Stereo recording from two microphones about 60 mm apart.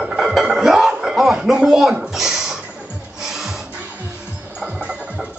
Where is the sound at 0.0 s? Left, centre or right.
Centre.